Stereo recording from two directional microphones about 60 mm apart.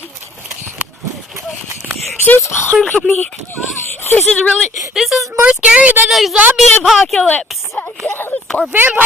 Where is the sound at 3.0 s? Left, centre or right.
Left.